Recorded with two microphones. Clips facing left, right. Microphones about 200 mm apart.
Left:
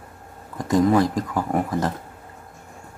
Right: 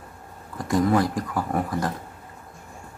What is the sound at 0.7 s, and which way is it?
Speech, 20° left (ahead or behind).